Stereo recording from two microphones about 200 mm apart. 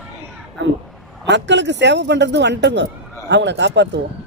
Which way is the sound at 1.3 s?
60° right (ahead or behind).